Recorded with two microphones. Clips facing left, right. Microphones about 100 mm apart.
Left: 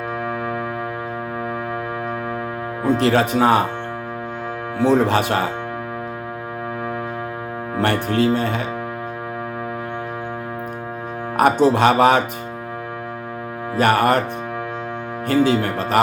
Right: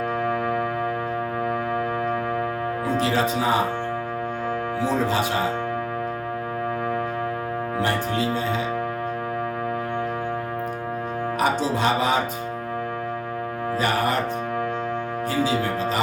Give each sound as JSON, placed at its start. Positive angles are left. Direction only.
{"t": 2.8, "sound": "music", "side_deg": 60}
{"t": 4.8, "sound": "music", "side_deg": 65}
{"t": 7.8, "sound": "music", "side_deg": 60}
{"t": 11.3, "sound": "music", "side_deg": 60}
{"t": 13.7, "sound": "music", "side_deg": 60}
{"t": 15.3, "sound": "music", "side_deg": 60}